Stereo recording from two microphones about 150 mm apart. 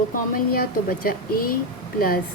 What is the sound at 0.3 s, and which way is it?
Speech, 70° left (ahead or behind).